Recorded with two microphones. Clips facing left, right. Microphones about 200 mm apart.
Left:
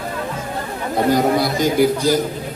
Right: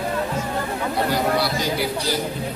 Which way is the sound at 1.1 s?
45° left (ahead or behind).